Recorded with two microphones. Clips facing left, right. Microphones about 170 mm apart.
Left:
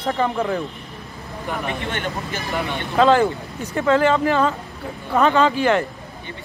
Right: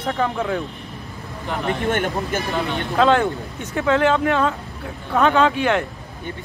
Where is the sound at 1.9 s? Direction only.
50° right (ahead or behind).